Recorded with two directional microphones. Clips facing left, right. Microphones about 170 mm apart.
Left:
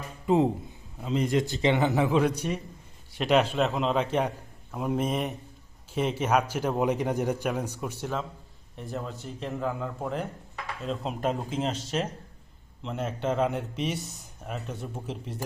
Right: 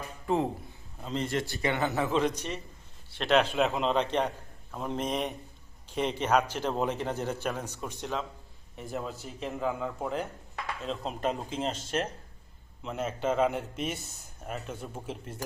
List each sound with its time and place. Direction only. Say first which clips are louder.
0.3 s a man's voice: left 5 dB; 15° left (ahead or behind); by 15.4 s centre (ahead or behind)